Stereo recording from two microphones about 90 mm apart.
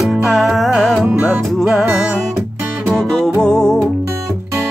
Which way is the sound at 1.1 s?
20° right (ahead or behind).